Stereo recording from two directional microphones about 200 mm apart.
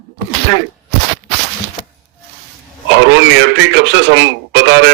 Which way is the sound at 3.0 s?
65° right (ahead or behind).